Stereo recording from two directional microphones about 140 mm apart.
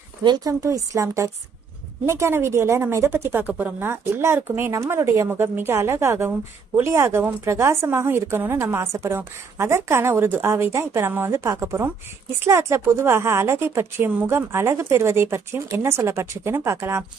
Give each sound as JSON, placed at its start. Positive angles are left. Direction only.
{"t": 0.3, "sound": "a woman's voice", "side_deg": -30}